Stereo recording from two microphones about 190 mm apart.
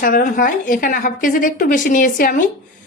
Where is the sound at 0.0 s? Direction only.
45° left (ahead or behind).